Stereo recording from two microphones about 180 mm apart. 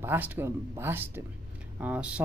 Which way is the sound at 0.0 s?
10° right (ahead or behind).